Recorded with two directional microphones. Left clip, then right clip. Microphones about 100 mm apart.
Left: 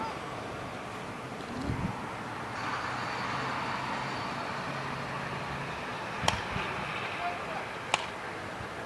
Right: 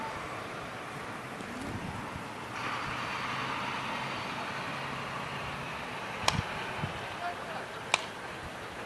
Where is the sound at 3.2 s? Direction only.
25° right (ahead or behind).